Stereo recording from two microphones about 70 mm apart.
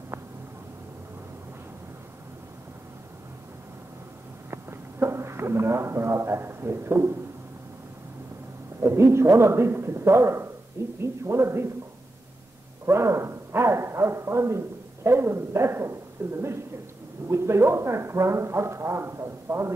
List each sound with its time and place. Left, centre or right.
4.5 s a sound: right
8.8 s speech: right
12.8 s speech: right